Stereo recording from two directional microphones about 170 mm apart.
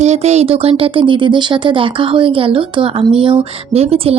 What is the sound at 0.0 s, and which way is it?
Speech, 40° right (ahead or behind).